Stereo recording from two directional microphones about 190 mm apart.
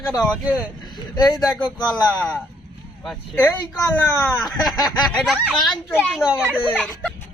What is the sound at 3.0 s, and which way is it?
Speech, centre (ahead or behind).